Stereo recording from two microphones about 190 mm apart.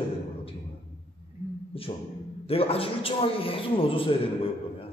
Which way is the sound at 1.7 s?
30° left (ahead or behind).